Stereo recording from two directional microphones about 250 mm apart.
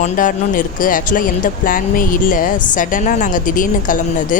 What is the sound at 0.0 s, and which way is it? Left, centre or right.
Speech, left.